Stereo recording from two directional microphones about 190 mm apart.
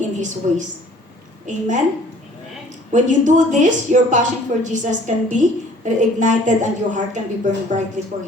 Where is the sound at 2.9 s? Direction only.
40° right (ahead or behind).